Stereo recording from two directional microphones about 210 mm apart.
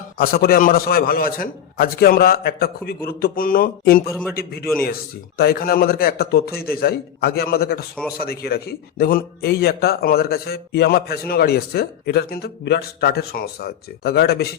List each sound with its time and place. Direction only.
0.2 s speech: 45° left (ahead or behind)